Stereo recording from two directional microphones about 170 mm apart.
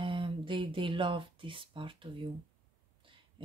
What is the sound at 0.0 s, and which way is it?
Speech, 30° right (ahead or behind).